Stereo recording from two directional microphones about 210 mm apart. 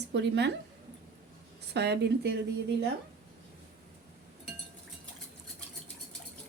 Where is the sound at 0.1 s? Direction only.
55° right (ahead or behind).